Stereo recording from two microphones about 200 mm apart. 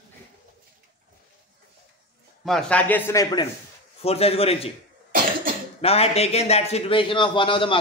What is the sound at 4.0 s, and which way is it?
Speech, 30° left (ahead or behind).